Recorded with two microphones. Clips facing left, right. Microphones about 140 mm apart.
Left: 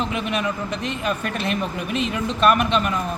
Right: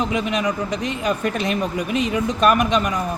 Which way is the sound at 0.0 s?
15° right (ahead or behind).